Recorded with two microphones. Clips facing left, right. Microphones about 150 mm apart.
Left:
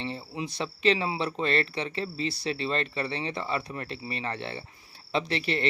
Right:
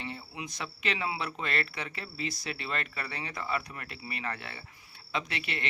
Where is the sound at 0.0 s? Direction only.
30° left (ahead or behind).